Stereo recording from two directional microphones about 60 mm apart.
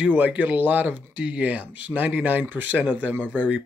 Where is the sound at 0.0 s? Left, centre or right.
Right.